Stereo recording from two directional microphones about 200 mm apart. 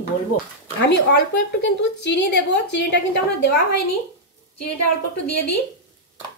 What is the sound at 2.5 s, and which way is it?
Speech, 60° left (ahead or behind).